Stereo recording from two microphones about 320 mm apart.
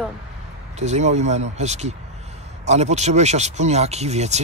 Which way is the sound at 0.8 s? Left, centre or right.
Right.